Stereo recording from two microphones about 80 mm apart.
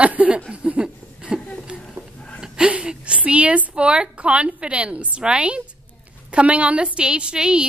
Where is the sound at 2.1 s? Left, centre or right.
Centre.